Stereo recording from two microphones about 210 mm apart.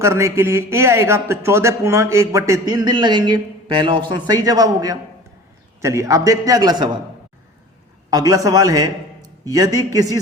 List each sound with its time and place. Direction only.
0.0 s a man's voice: 15° right (ahead or behind)
8.1 s a man's voice: 15° right (ahead or behind)